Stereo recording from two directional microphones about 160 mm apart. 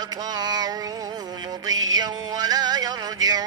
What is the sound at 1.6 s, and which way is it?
Music, 25° right (ahead or behind).